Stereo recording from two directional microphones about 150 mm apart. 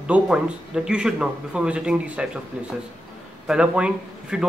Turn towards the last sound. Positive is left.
turn(degrees=-5)  # may be behind; listen again after turning